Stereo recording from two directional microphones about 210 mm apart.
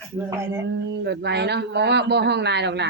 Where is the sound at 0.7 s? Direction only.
55° right (ahead or behind).